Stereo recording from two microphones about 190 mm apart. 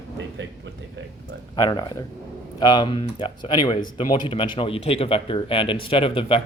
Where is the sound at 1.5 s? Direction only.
15° left (ahead or behind).